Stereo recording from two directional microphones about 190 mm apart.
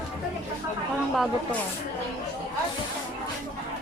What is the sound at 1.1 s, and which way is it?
Speech, centre (ahead or behind).